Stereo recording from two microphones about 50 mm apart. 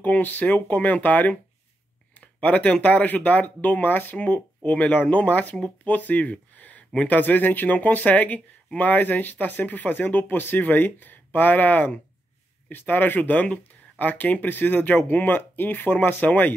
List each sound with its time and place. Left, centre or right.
0.0 s speech: left